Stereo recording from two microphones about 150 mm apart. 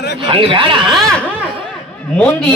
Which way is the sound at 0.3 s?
35° right (ahead or behind).